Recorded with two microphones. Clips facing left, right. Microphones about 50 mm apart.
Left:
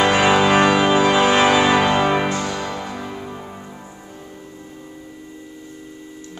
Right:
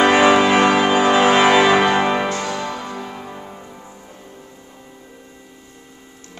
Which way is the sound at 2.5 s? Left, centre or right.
Centre.